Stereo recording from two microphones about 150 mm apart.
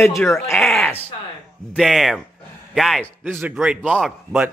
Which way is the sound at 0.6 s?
Centre (ahead or behind).